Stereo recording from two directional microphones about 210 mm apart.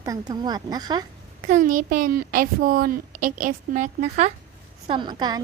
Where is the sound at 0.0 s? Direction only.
15° right (ahead or behind).